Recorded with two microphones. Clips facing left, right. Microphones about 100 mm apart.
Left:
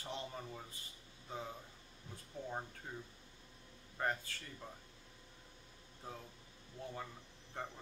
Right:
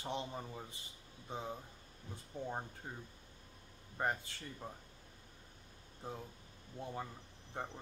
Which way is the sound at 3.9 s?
20° right (ahead or behind).